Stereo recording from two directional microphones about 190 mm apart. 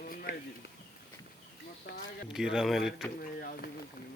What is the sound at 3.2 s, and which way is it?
Speech, 50° left (ahead or behind).